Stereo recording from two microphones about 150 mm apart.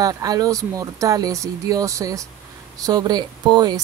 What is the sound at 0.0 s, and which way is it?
Speech, 25° right (ahead or behind).